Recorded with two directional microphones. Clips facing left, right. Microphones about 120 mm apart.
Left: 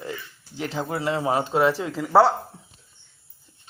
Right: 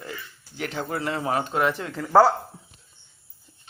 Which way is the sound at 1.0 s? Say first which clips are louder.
Left 3 dB; 20° left (ahead or behind).